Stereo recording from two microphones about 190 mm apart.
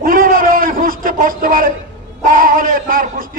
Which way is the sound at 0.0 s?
50° right (ahead or behind).